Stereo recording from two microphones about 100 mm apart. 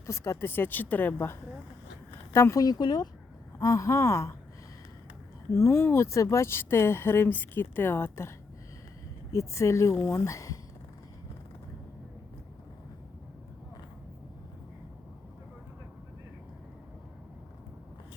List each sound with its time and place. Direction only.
0.0 s speech: 30° left (ahead or behind)
3.6 s speech: 35° left (ahead or behind)
5.5 s speech: 25° left (ahead or behind)
9.3 s speech: 30° left (ahead or behind)